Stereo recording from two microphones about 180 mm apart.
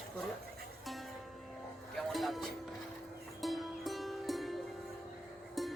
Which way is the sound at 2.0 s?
Centre (ahead or behind).